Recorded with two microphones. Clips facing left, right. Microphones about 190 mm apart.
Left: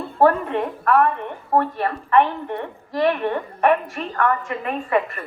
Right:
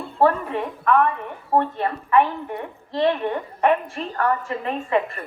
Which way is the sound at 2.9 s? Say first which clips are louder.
Left 1 dB; 25° right (ahead or behind).